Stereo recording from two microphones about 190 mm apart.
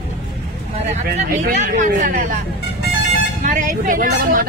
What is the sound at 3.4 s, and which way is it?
Speech, 45° right (ahead or behind).